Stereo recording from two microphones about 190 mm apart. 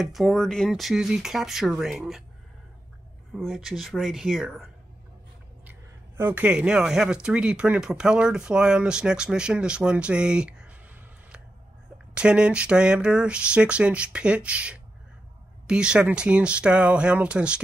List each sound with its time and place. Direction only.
0.0 s speech: centre (ahead or behind)
3.3 s speech: centre (ahead or behind)
5.7 s speech: 10° right (ahead or behind)
12.1 s speech: 5° right (ahead or behind)